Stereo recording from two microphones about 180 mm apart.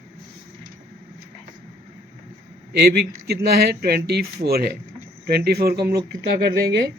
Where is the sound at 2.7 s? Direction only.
60° right (ahead or behind).